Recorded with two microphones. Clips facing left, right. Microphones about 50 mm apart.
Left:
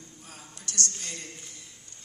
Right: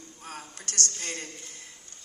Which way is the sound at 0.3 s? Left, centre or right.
Right.